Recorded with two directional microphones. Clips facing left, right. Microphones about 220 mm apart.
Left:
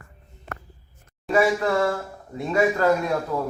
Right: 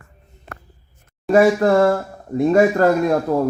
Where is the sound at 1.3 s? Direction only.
45° right (ahead or behind).